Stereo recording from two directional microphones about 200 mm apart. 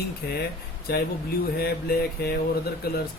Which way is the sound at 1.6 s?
50° left (ahead or behind).